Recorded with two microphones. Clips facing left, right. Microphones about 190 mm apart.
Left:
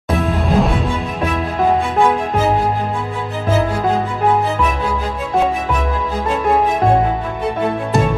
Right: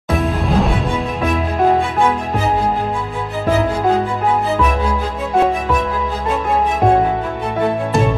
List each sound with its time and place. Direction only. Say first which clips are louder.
0.2 s music: left 1 dB; centre (ahead or behind)